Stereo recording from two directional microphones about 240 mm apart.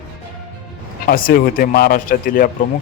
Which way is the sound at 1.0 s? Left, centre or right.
Left.